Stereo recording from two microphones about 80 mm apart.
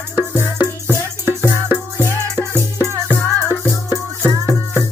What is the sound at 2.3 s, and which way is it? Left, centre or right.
Music, right.